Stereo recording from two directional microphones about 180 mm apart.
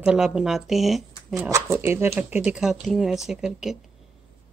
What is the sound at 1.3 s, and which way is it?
Speech, 15° right (ahead or behind).